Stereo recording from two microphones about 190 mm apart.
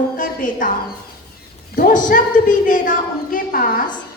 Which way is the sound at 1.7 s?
45° left (ahead or behind).